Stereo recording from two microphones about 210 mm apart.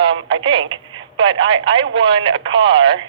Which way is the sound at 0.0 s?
25° right (ahead or behind).